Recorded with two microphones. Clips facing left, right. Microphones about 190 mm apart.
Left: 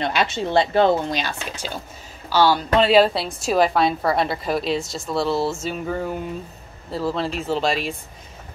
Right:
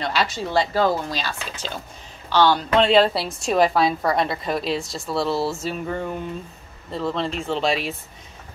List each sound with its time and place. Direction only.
0.0 s a woman's voice: 20° left (ahead or behind); by 7.9 s centre (ahead or behind)